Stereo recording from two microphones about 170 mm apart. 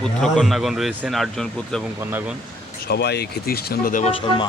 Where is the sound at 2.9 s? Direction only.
75° left (ahead or behind).